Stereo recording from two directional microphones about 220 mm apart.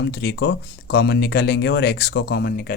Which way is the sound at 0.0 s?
50° left (ahead or behind).